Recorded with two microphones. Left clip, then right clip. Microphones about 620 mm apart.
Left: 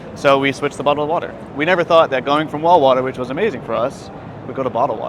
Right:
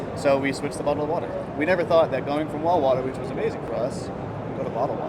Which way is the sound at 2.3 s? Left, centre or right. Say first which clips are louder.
Left 9 dB; left.